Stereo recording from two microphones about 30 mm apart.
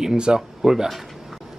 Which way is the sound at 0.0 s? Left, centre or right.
Right.